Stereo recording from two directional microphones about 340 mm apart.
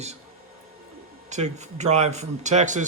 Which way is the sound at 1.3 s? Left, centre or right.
Centre.